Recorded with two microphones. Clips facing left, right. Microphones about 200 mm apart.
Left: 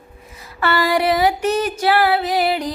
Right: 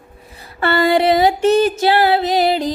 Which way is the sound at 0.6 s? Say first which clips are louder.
Right 4 dB; 25° right (ahead or behind).